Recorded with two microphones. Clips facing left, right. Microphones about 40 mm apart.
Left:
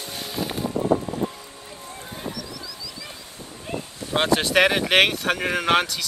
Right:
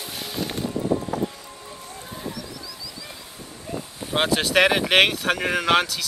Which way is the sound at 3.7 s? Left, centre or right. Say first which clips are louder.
Left 1 dB; left.